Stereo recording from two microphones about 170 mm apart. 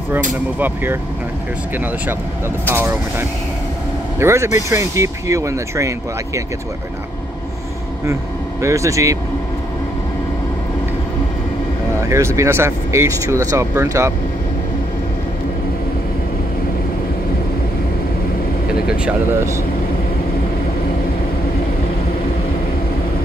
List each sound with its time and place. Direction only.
0.6 s speech: 10° right (ahead or behind)
2.7 s speech: 15° right (ahead or behind)
8.0 s speech: 15° right (ahead or behind)
12.1 s speech: 15° right (ahead or behind)